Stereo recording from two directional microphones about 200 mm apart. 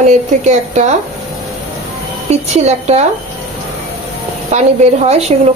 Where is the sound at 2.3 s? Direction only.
35° right (ahead or behind).